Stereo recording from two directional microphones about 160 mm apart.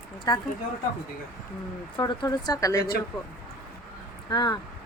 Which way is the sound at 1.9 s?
25° left (ahead or behind).